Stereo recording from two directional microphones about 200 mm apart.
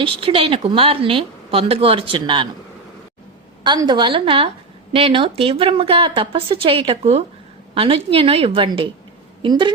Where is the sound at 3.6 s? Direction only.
20° right (ahead or behind).